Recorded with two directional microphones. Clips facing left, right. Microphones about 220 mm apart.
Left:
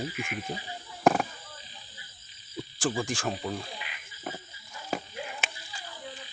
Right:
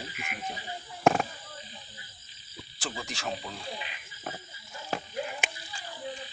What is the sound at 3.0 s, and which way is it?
Speech, 50° left (ahead or behind).